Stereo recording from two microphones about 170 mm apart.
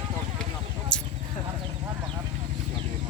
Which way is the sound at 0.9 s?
5° left (ahead or behind).